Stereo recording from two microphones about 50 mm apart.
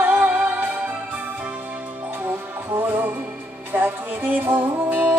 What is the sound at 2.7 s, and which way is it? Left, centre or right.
Music, right.